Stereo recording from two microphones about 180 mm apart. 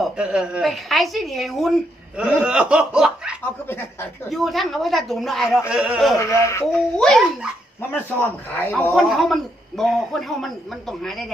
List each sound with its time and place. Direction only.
0.0 s a man's voice: 5° right (ahead or behind)
3.7 s speech: 10° left (ahead or behind)
4.3 s a man's voice: centre (ahead or behind)
6.1 s speech: 15° left (ahead or behind)
7.0 s a man's voice: centre (ahead or behind)
9.0 s a man's voice: centre (ahead or behind)